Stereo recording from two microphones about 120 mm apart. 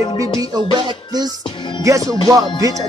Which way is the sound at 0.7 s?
35° right (ahead or behind).